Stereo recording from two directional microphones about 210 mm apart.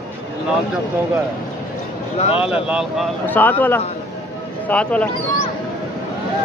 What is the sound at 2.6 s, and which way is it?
Speech, 5° right (ahead or behind).